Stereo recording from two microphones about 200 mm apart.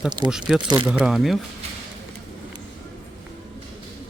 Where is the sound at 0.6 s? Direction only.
25° right (ahead or behind).